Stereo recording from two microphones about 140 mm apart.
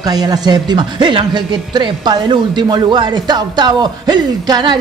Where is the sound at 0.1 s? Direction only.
30° right (ahead or behind).